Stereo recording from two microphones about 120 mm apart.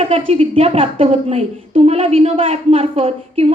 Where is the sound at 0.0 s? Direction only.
50° right (ahead or behind).